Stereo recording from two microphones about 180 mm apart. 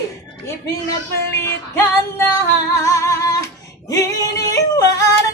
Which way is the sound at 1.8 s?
15° left (ahead or behind).